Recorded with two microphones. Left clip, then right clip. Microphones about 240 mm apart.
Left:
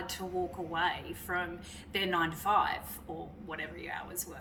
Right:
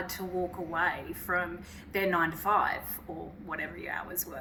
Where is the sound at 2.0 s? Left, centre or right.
Centre.